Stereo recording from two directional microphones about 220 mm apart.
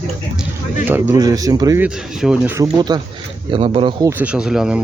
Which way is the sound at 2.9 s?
20° right (ahead or behind).